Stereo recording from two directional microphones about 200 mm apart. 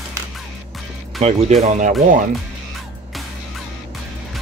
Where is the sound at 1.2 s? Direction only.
35° right (ahead or behind).